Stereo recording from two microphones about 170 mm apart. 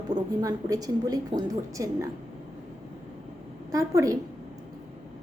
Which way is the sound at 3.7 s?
20° right (ahead or behind).